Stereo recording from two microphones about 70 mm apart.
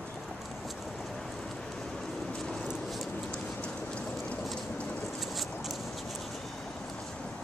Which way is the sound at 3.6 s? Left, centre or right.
Centre.